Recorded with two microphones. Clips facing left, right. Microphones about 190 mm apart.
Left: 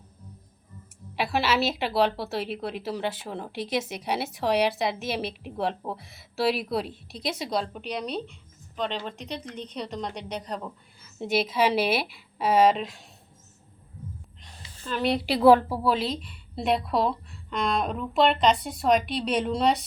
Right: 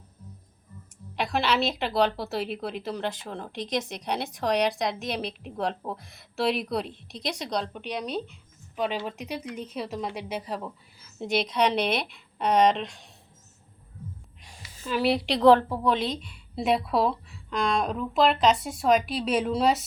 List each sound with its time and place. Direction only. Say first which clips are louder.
1.1 s a woman's voice: left 1 dB; 5° left (ahead or behind)
14.8 s a woman's voice: right 1 dB; 5° right (ahead or behind)